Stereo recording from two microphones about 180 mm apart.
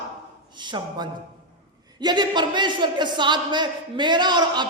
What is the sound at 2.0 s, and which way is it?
A man's voice, 25° right (ahead or behind).